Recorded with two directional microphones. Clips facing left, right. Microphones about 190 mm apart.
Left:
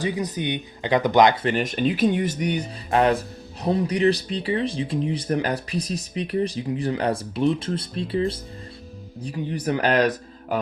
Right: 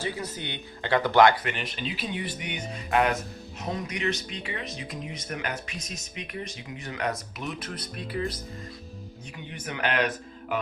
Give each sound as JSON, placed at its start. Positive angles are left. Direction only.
{"t": 0.0, "sound": "speech", "side_deg": 15}
{"t": 1.5, "sound": "speech", "side_deg": 45}